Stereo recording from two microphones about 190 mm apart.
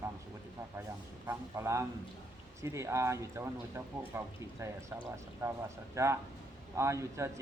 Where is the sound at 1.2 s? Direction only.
15° right (ahead or behind).